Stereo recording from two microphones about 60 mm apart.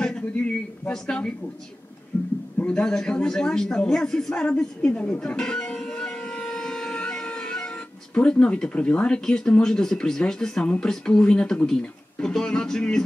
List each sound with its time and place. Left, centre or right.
0.0 s a sound: centre
0.4 s speech: left
2.1 s a man's voice: left
2.6 s speech: centre